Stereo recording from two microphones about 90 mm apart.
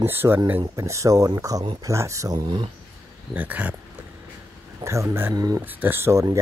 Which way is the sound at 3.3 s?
15° right (ahead or behind).